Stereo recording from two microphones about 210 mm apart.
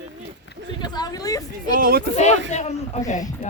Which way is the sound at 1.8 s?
45° right (ahead or behind).